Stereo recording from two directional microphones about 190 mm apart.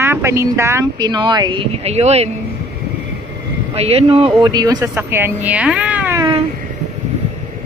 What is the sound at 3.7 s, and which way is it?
Speech, 30° right (ahead or behind).